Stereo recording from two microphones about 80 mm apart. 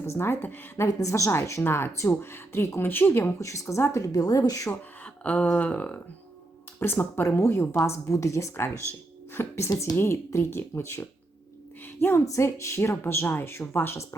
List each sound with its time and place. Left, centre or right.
0.0 s speech: left
0.9 s speech: left
3.5 s a woman's voice: left
4.7 s speech: centre
6.7 s speech: left